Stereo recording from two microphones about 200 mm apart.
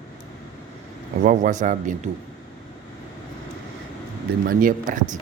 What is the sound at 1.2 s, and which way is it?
Speech, 40° right (ahead or behind).